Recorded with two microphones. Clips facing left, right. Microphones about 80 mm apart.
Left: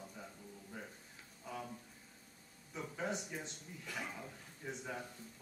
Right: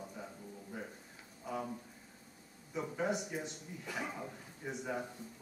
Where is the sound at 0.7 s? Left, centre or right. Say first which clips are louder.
Right 4 dB; centre.